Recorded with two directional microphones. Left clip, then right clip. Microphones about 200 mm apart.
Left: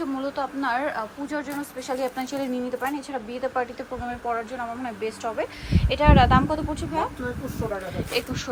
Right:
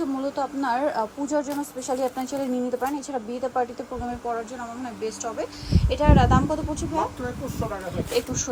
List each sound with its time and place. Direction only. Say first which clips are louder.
0.0 s a woman's voice: right 1 dB; 15° right (ahead or behind)
5.0 s a woman's voice: left 1 dB; 10° right (ahead or behind)
8.1 s a woman's voice: right 2 dB; 15° right (ahead or behind)